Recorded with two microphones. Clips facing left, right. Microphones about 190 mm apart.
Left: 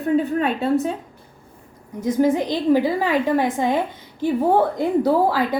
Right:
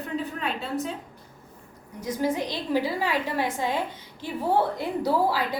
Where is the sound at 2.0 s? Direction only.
50° left (ahead or behind).